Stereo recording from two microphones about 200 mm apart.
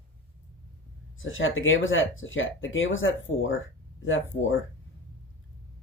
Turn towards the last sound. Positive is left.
turn(degrees=75)  # may be behind; listen again after turning